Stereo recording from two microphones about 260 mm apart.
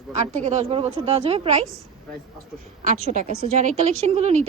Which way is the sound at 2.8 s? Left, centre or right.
Right.